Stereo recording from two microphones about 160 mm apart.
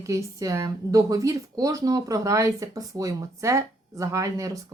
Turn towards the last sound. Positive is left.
turn(degrees=-20)  # may be behind; listen again after turning